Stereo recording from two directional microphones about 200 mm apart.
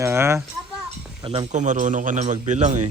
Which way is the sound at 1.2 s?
25° right (ahead or behind).